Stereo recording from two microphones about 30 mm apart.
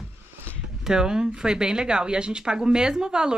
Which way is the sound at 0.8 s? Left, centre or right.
Right.